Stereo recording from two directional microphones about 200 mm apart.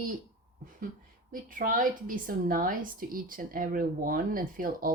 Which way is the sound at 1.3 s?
45° right (ahead or behind).